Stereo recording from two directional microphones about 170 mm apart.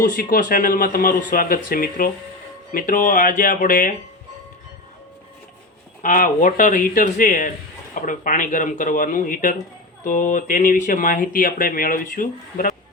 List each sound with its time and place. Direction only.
0.0 s speech: 55° left (ahead or behind)
6.0 s speech: 55° left (ahead or behind)